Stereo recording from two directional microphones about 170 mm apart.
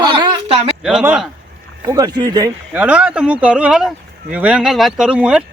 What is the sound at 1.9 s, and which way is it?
Speech, 20° right (ahead or behind).